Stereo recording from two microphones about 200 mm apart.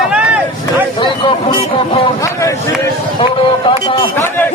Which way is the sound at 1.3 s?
25° left (ahead or behind).